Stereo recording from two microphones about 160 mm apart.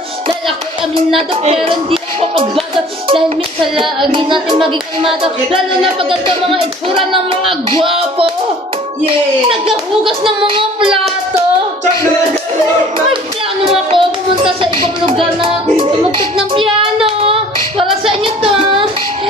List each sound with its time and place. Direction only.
1.3 s speech: 35° right (ahead or behind)
13.7 s speech: 35° right (ahead or behind)
16.3 s child singing: 35° right (ahead or behind)
18.2 s music: 35° right (ahead or behind)